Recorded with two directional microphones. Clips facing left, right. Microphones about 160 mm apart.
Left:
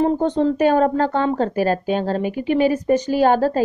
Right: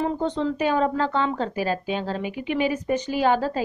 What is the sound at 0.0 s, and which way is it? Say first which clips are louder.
A woman's voice: left 7 dB; 45° left (ahead or behind).